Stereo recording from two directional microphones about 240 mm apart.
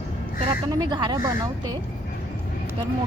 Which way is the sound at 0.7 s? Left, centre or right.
Centre.